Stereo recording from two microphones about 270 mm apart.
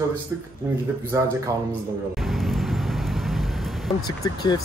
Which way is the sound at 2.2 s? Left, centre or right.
Centre.